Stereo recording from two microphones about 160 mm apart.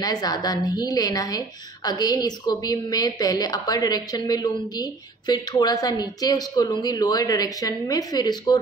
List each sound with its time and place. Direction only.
0.0 s a woman's voice: 25° left (ahead or behind)